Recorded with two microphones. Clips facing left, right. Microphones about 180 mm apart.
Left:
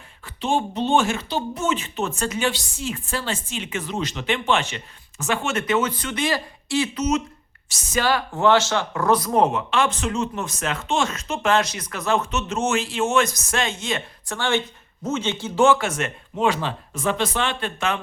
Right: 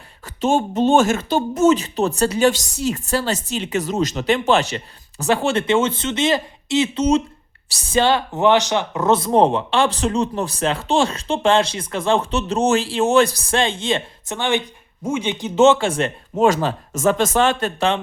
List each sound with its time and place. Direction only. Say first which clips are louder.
0.3 s speech: right 5 dB; 45° right (ahead or behind)